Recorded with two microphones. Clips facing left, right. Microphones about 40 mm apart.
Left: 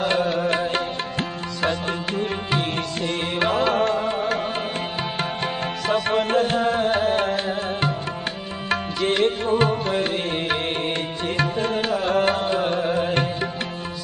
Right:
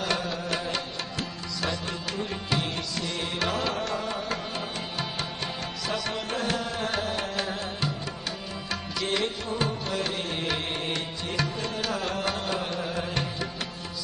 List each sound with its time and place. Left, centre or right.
0.0 s music: left
5.9 s music: left